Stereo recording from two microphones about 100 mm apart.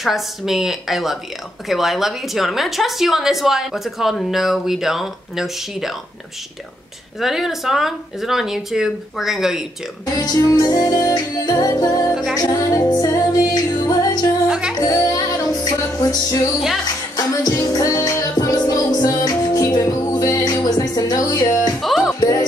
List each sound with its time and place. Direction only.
0.0 s a woman's voice: centre (ahead or behind)
7.2 s a woman's voice: 5° right (ahead or behind)
10.1 s music: 35° left (ahead or behind)
12.1 s a woman's voice: 5° right (ahead or behind)
12.4 s music: 35° left (ahead or behind)
21.8 s music: centre (ahead or behind)